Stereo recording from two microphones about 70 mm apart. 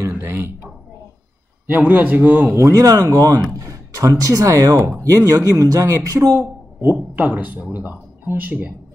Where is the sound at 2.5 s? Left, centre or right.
Right.